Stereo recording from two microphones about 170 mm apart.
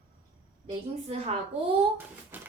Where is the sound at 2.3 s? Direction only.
10° right (ahead or behind).